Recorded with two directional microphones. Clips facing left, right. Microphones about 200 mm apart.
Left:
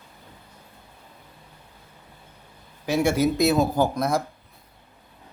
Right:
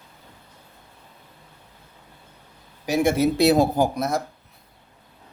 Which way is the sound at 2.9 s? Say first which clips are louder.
Right 1 dB; 55° right (ahead or behind).